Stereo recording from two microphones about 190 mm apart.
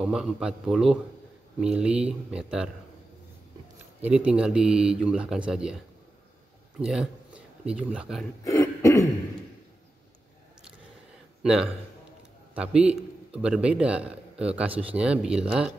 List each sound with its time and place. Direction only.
0.0 s a man's voice: 5° right (ahead or behind)
4.0 s a man's voice: 5° right (ahead or behind)
6.8 s speech: 5° right (ahead or behind)
8.5 s throat clearing: 15° left (ahead or behind)
11.4 s a man's voice: 5° right (ahead or behind)